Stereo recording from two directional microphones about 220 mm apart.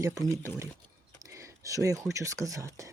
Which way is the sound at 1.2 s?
15° right (ahead or behind).